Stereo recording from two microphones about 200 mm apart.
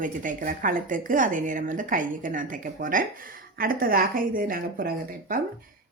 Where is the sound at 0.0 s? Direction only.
40° right (ahead or behind).